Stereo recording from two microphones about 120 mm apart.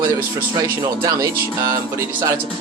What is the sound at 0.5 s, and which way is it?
Speech, 30° right (ahead or behind).